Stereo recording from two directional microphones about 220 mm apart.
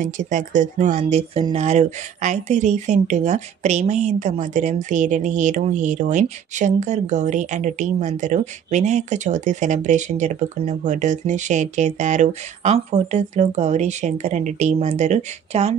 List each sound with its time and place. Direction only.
0.0 s speech: 35° right (ahead or behind)